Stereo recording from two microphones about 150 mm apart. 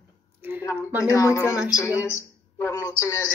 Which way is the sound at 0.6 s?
20° left (ahead or behind).